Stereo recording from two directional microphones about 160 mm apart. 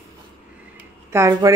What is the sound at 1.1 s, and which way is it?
Speech, 20° right (ahead or behind).